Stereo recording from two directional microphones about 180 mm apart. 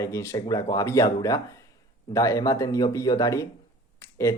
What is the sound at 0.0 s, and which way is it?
Speech, 15° left (ahead or behind).